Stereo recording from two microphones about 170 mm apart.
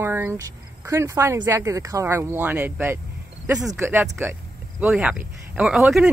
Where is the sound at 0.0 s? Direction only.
15° right (ahead or behind).